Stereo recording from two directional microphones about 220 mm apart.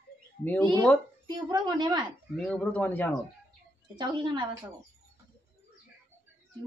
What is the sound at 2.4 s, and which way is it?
Speech, 5° left (ahead or behind).